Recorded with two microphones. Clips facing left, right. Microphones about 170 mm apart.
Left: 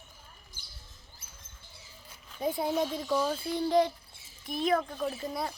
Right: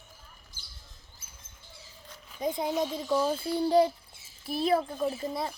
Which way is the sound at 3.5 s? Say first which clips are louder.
Right 3 dB; 35° right (ahead or behind).